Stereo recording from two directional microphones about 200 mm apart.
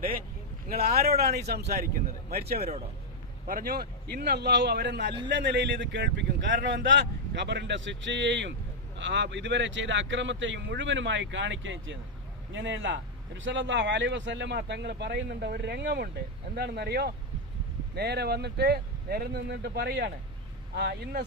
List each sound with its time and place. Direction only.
0.7 s a man's voice: 50° right (ahead or behind)